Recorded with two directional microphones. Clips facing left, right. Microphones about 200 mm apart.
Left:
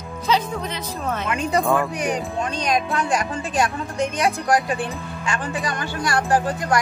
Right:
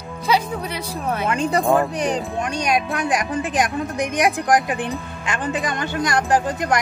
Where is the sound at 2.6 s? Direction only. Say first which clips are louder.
Right 1 dB; 10° right (ahead or behind).